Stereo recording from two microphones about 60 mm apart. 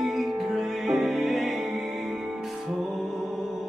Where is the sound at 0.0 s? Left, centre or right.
Centre.